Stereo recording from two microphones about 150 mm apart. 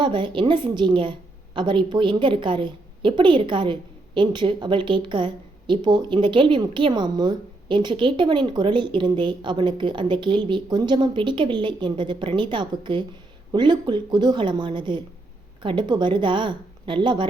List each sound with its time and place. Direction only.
0.0 s a woman's voice: 35° right (ahead or behind)